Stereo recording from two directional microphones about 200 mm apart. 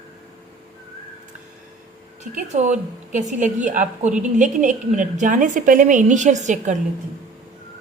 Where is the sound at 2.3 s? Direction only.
35° right (ahead or behind).